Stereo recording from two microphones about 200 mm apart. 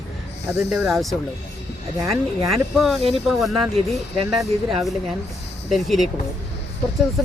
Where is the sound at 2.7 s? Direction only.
Centre (ahead or behind).